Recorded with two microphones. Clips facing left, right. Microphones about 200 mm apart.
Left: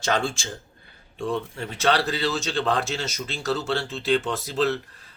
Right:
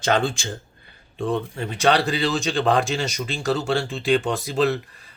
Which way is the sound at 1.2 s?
20° right (ahead or behind).